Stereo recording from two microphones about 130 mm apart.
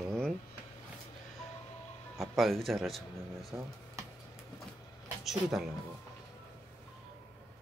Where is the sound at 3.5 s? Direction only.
20° right (ahead or behind).